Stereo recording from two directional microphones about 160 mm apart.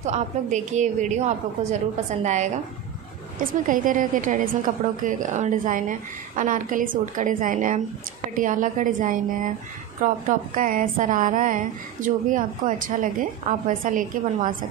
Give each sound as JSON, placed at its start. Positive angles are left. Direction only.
{"t": 0.0, "sound": "a woman's voice", "side_deg": -45}